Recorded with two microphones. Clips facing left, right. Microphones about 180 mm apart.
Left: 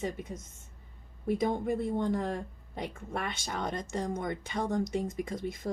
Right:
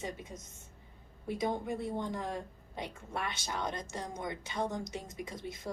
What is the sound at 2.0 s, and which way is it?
Speech, 55° left (ahead or behind).